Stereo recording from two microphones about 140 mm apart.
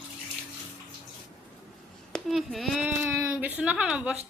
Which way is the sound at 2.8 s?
15° right (ahead or behind).